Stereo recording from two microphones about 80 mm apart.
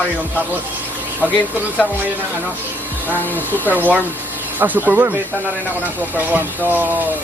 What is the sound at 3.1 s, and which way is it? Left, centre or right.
Speech, right.